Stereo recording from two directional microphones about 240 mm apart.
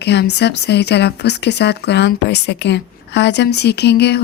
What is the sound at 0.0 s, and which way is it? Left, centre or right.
A woman's voice, left.